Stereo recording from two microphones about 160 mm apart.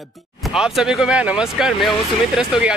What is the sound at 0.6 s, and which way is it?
Speech, 5° right (ahead or behind).